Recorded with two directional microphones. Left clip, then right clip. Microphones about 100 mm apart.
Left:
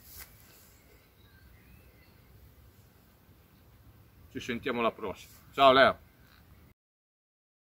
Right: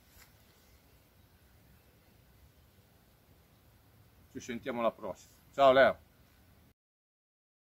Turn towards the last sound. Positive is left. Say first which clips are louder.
# left 2 dB
turn(degrees=-15)  # may be behind; listen again after turning